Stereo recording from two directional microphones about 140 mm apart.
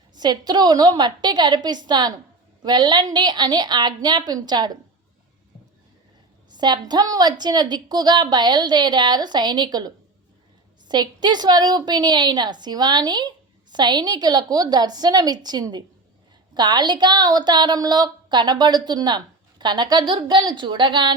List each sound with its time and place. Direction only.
0.1 s a woman's voice: 30° right (ahead or behind)
6.5 s a woman's voice: 30° right (ahead or behind)